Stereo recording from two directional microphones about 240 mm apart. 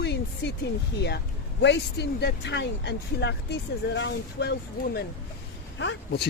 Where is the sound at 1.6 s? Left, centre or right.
Left.